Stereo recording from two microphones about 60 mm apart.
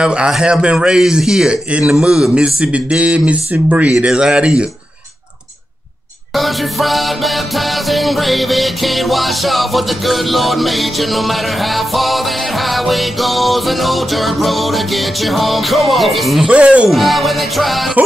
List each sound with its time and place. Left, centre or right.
0.0 s a man's voice: centre
3.9 s a man's voice: centre
6.3 s music: centre
16.4 s speech: centre
16.9 s music: centre